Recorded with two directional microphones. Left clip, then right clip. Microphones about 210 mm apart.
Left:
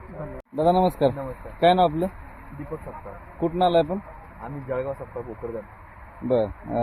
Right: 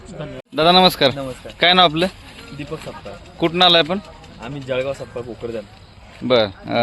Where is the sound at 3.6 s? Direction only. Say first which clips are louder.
Right 7 dB; 55° right (ahead or behind).